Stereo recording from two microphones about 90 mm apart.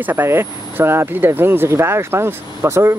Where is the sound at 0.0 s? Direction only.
25° right (ahead or behind).